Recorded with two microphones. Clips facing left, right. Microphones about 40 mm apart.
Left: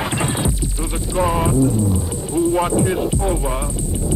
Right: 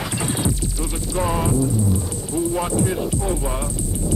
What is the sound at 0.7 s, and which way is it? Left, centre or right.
Speech, left.